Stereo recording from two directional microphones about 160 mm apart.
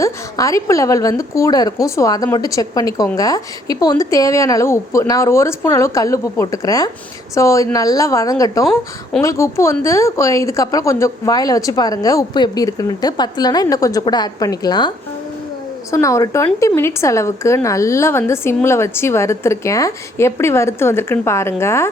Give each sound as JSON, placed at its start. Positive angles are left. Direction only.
{"t": 0.0, "sound": "a woman's voice", "side_deg": 20}